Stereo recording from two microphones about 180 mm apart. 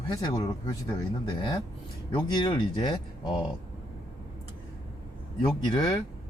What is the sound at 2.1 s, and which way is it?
Speech, 25° left (ahead or behind).